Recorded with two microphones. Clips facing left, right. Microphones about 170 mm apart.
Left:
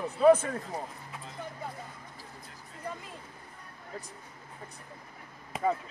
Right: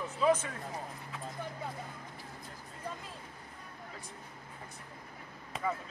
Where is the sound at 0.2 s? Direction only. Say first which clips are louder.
Left 8 dB; 55° left (ahead or behind).